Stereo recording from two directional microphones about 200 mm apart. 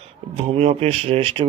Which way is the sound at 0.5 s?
30° right (ahead or behind).